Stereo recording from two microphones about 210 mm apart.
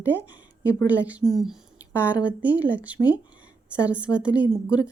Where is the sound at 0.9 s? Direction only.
5° right (ahead or behind).